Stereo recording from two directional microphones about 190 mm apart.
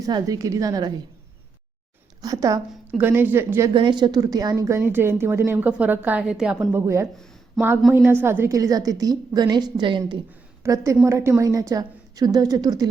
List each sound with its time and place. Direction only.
0.0 s a woman's voice: 20° right (ahead or behind)
2.2 s speech: 20° right (ahead or behind)
3.8 s a woman's voice: 25° right (ahead or behind)